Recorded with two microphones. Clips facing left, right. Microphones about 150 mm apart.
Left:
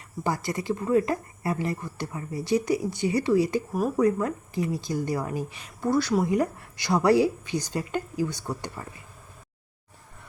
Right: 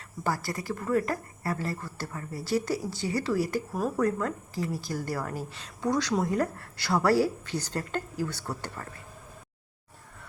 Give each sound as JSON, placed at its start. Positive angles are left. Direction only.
{"t": 0.3, "sound": "speech", "side_deg": 20}